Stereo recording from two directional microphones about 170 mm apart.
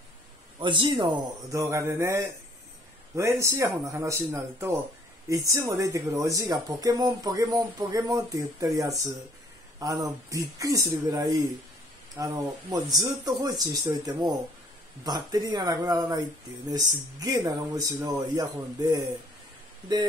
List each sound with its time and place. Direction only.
0.6 s speech: 30° right (ahead or behind)